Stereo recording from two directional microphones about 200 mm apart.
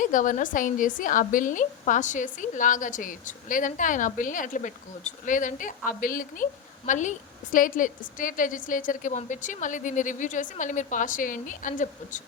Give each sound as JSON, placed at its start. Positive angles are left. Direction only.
{"t": 0.0, "sound": "a woman's voice", "side_deg": 40}